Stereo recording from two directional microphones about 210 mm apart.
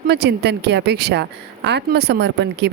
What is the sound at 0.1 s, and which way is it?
A woman's voice, 50° right (ahead or behind).